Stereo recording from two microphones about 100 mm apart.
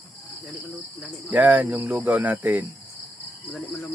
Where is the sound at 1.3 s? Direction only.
15° right (ahead or behind).